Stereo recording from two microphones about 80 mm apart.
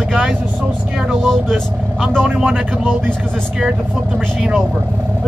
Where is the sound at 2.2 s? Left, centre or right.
Centre.